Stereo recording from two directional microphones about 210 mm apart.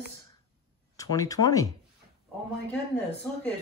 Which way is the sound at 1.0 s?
15° left (ahead or behind).